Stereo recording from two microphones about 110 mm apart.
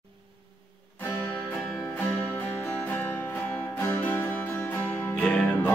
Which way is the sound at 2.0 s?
15° left (ahead or behind).